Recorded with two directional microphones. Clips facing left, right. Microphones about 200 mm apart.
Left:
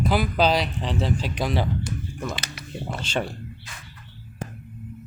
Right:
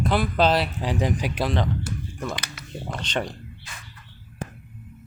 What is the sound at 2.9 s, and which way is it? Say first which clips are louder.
Speech: even; 5° left (ahead or behind).